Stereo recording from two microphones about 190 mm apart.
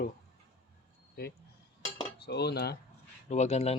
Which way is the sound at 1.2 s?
55° left (ahead or behind).